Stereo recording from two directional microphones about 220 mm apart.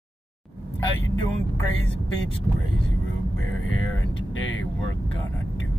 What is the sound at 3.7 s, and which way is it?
Speech, 65° left (ahead or behind).